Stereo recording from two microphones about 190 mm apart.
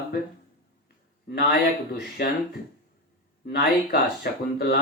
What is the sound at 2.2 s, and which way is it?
Speech, 60° left (ahead or behind).